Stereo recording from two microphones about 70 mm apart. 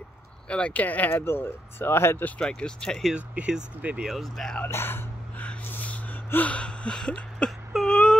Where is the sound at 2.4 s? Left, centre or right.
Centre.